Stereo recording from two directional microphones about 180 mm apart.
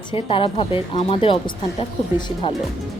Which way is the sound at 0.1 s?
30° left (ahead or behind).